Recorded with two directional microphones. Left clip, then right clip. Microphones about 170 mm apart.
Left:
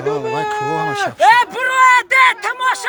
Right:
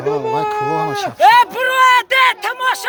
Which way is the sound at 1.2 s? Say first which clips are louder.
Right 2 dB; 65° right (ahead or behind).